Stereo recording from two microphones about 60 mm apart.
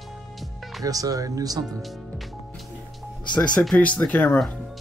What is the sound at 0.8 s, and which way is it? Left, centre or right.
Speech, right.